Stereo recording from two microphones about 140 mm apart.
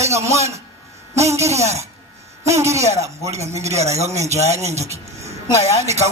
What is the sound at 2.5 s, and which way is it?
Speech, 20° right (ahead or behind).